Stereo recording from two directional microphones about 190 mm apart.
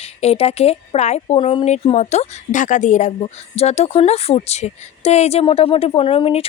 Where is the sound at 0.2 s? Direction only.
30° left (ahead or behind).